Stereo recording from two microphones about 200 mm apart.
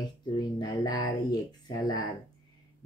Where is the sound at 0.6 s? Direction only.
20° left (ahead or behind).